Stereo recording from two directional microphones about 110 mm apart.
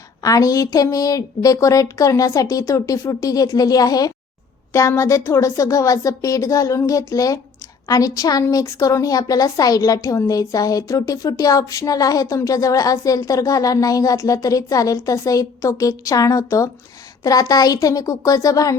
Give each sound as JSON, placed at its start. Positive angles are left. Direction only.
{"t": 0.2, "sound": "speech", "side_deg": 30}